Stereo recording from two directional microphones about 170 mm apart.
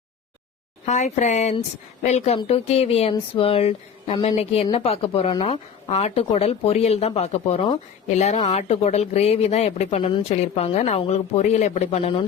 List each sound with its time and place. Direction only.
0.9 s speech: 40° left (ahead or behind)